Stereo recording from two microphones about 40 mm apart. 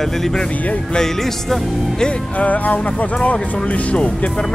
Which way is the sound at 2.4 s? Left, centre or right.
Left.